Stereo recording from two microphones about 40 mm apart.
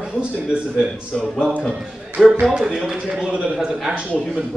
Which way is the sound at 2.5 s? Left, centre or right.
Centre.